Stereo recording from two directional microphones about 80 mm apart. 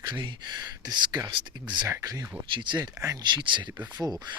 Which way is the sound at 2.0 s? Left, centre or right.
Right.